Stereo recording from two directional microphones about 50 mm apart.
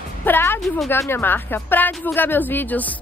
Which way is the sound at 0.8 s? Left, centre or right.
Left.